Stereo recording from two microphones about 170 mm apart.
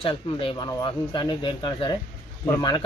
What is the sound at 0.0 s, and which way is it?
Speech, 30° left (ahead or behind).